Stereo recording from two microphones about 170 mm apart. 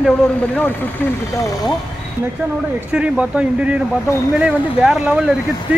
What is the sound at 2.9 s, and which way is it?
Speech, 5° right (ahead or behind).